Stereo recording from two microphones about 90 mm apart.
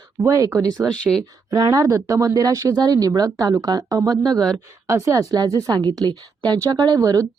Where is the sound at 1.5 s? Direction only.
45° right (ahead or behind).